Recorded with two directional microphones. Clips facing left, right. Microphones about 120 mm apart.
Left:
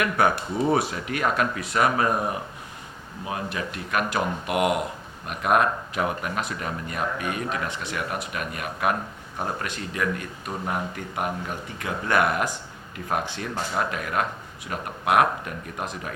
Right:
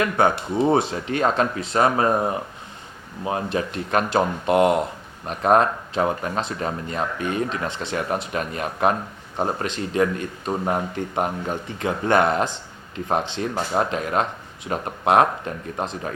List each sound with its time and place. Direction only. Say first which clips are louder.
0.0 s speech: right 2 dB; 25° right (ahead or behind)